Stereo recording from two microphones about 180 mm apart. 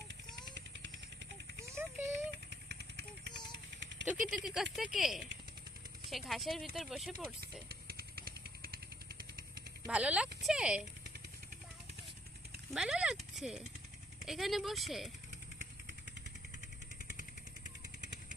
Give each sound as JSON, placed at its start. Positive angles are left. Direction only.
{"t": 0.5, "sound": "vehicle", "side_deg": -90}
{"t": 1.7, "sound": "a sound", "side_deg": -15}
{"t": 2.6, "sound": "vehicle", "side_deg": -65}
{"t": 4.0, "sound": "speech", "side_deg": -5}
{"t": 7.4, "sound": "vehicle", "side_deg": -60}
{"t": 9.8, "sound": "speech", "side_deg": -5}
{"t": 12.7, "sound": "speech", "side_deg": -5}